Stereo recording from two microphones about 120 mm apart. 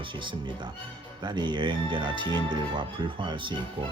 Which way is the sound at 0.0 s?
45° right (ahead or behind).